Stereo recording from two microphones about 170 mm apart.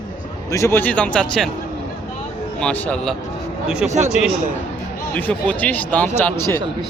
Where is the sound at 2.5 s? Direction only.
10° left (ahead or behind).